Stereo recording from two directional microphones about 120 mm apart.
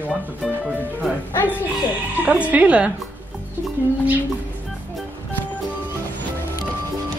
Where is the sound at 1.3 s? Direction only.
15° left (ahead or behind).